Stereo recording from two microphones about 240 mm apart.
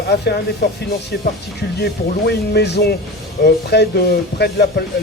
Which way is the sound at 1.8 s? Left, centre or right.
Left.